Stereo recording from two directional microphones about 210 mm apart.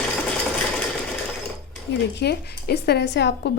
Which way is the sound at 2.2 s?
50° left (ahead or behind).